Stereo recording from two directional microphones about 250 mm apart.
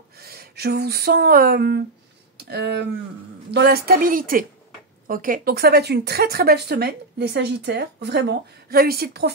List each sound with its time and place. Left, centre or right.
0.2 s speech: right